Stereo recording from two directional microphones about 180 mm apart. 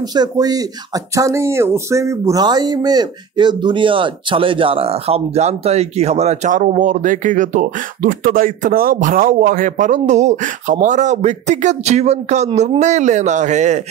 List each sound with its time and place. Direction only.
0.0 s a woman's voice: 20° right (ahead or behind); by 13.8 s 40° right (ahead or behind)